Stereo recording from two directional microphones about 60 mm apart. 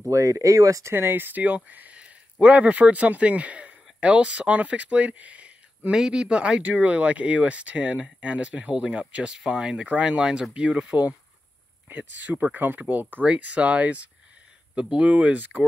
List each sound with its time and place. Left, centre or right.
0.1 s speech: right
0.9 s speech: right; by 11.0 s centre
11.9 s speech: right